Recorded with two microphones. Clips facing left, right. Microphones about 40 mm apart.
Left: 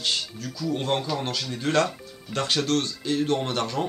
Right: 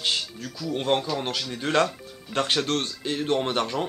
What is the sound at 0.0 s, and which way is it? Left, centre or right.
Speech, right.